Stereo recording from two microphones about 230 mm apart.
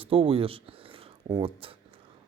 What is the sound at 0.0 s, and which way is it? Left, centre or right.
A man's voice, right.